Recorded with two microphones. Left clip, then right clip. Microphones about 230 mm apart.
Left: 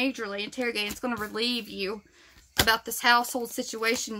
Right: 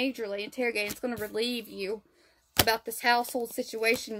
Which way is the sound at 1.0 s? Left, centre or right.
Centre.